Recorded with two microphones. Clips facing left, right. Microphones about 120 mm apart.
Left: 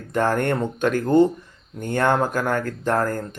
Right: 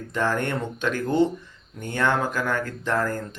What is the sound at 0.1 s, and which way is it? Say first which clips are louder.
Speech: left 4 dB; 50° left (ahead or behind).